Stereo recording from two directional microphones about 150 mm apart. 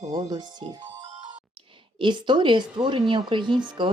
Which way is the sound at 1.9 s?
30° right (ahead or behind).